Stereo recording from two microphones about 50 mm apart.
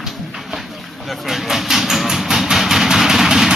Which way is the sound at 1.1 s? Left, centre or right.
Centre.